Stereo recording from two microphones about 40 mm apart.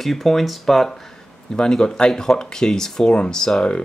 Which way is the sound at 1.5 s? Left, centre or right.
Centre.